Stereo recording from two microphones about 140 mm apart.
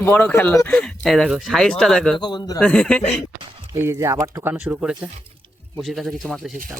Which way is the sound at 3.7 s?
20° right (ahead or behind).